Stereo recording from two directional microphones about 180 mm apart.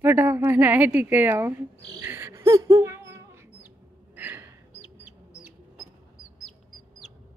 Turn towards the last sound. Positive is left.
turn(degrees=0)  # may be behind; listen again after turning